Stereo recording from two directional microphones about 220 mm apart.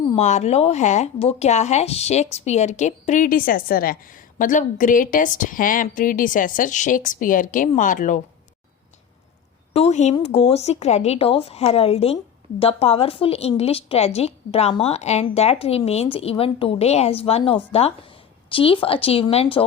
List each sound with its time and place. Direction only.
0.2 s speech: 30° left (ahead or behind)
9.7 s a woman's voice: 30° left (ahead or behind)